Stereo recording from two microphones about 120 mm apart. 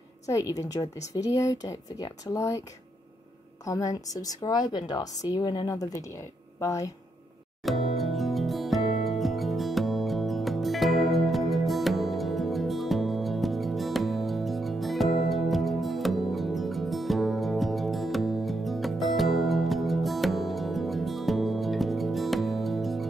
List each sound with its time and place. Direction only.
0.3 s speech: 25° left (ahead or behind)
3.6 s a woman's voice: 30° left (ahead or behind)
7.6 s music: centre (ahead or behind)